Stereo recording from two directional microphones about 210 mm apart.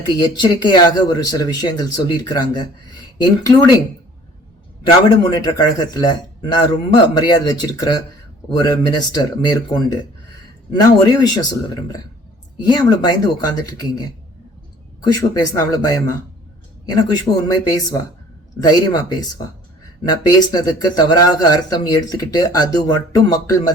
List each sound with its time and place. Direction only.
0.0 s speech: 20° left (ahead or behind)
4.8 s speech: 20° left (ahead or behind)